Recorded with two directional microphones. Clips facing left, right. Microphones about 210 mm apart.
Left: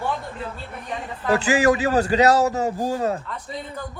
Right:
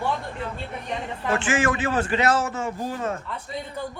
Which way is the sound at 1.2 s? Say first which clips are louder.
Left 5 dB; 35° left (ahead or behind).